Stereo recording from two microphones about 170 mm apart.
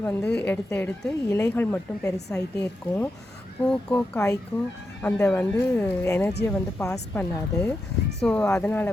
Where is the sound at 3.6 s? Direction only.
5° left (ahead or behind).